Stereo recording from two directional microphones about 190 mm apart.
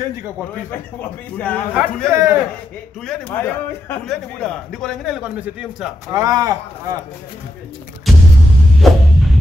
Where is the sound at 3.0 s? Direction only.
5° left (ahead or behind).